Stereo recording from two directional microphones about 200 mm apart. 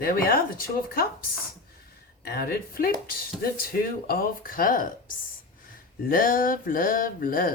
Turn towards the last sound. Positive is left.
turn(degrees=45)  # may be behind; listen again after turning